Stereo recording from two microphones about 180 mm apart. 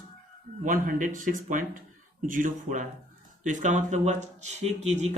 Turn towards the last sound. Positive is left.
turn(degrees=-40)  # may be behind; listen again after turning